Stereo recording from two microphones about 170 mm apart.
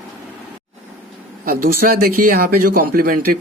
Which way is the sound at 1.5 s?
55° right (ahead or behind).